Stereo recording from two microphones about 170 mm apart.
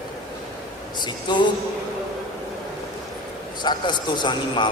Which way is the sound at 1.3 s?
25° left (ahead or behind).